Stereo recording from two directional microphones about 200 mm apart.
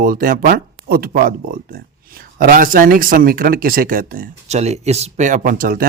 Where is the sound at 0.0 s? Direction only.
45° right (ahead or behind).